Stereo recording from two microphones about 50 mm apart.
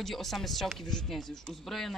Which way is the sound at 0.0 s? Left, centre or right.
Centre.